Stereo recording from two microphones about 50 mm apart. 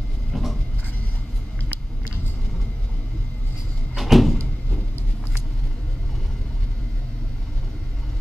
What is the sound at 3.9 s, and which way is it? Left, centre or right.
Door, centre.